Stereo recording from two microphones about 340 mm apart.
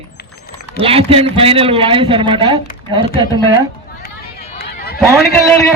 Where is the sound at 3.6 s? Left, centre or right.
Left.